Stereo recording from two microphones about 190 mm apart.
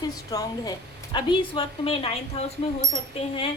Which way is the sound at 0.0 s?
20° left (ahead or behind).